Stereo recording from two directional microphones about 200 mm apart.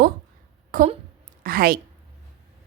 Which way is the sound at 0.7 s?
40° right (ahead or behind).